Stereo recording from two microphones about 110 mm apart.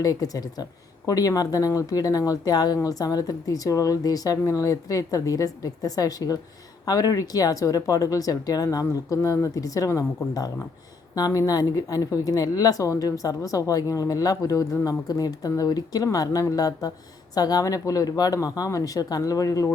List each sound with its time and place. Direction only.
0.0 s a woman's voice: 35° left (ahead or behind)